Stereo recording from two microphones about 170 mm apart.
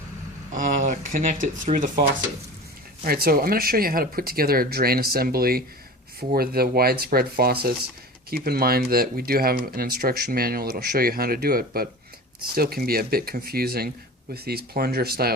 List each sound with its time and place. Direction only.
0.5 s speech: 50° right (ahead or behind)
1.7 s speech: 40° right (ahead or behind)
3.0 s speech: 60° right (ahead or behind)